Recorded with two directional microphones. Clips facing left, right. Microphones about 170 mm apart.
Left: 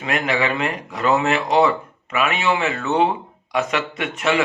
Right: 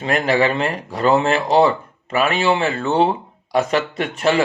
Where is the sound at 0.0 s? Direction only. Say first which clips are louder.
Right 4 dB; 35° right (ahead or behind).